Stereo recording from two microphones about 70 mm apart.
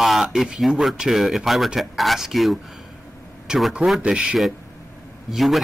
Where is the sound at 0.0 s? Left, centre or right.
Centre.